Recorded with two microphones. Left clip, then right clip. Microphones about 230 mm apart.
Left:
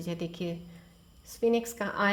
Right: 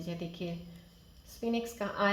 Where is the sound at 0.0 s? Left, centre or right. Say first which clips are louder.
Left 4 dB; left.